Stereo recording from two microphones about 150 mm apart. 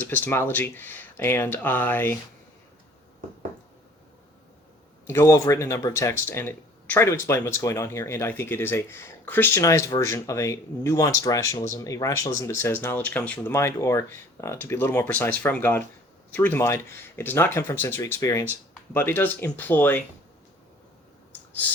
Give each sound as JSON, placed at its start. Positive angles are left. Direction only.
{"t": 0.0, "sound": "speech", "side_deg": 15}
{"t": 5.0, "sound": "speech", "side_deg": 20}